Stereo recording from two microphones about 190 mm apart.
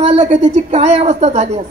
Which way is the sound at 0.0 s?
35° right (ahead or behind).